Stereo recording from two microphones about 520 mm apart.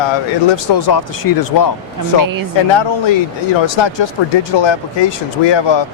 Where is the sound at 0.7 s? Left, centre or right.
Left.